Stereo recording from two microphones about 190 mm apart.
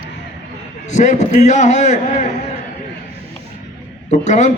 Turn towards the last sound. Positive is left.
turn(degrees=35)  # may be behind; listen again after turning